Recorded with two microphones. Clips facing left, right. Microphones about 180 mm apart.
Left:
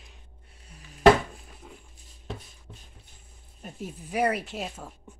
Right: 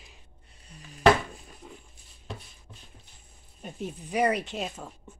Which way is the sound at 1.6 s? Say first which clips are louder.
Right 1 dB; centre (ahead or behind).